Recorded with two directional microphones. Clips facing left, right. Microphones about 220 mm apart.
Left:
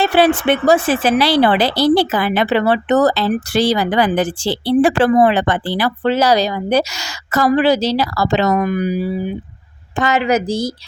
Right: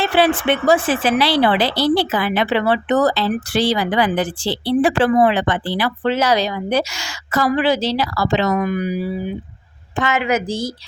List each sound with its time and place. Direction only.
0.0 s speech: 40° left (ahead or behind)
10.0 s a woman's voice: 35° left (ahead or behind)